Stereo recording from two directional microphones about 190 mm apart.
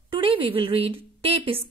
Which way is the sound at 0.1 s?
30° right (ahead or behind).